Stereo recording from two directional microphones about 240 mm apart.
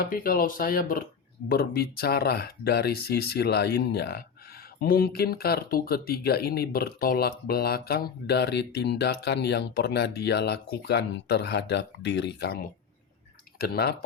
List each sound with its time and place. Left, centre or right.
0.0 s speech: left
13.6 s speech: left